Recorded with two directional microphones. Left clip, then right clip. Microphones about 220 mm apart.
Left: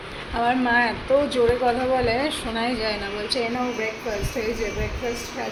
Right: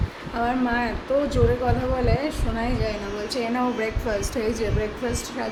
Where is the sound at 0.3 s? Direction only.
10° right (ahead or behind).